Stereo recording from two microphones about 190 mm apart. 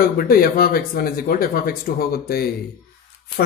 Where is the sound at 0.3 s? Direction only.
50° left (ahead or behind).